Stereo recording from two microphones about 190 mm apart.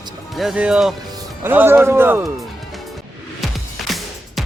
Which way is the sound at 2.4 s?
Centre (ahead or behind).